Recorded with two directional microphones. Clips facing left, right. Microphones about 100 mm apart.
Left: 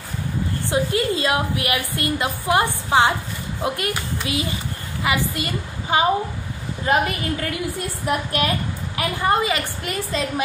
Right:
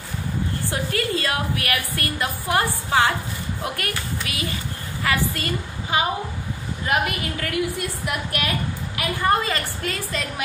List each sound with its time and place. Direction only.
0.7 s a woman's voice: 20° left (ahead or behind)
9.2 s a woman's voice: 15° left (ahead or behind)